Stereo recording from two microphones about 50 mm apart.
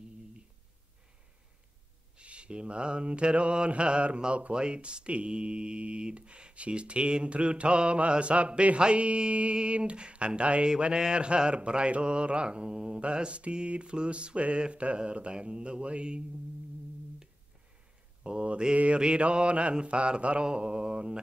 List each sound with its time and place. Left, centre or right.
2.1 s mantra: right
18.2 s mantra: right